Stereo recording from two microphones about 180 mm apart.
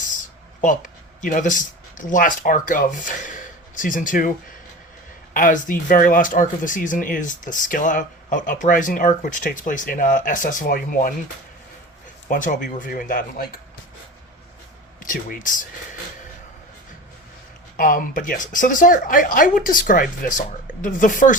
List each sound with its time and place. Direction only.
1.2 s speech: 45° left (ahead or behind)
5.3 s speech: 50° left (ahead or behind)
12.3 s speech: 45° left (ahead or behind)
15.0 s speech: 50° left (ahead or behind)
17.7 s speech: 50° left (ahead or behind)